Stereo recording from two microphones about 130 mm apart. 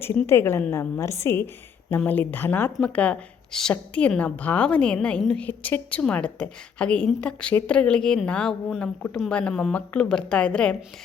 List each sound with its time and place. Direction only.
0.3 s a woman's voice: 20° left (ahead or behind)